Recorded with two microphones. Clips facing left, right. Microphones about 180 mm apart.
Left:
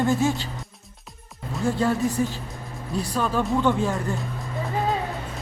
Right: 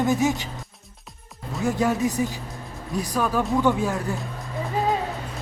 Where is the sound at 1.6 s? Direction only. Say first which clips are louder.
Even; 15° right (ahead or behind).